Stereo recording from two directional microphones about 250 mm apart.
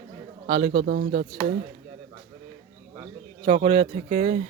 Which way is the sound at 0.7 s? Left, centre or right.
Right.